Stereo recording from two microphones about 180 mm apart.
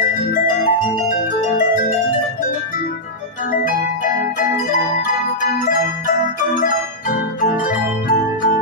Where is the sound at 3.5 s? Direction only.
50° left (ahead or behind).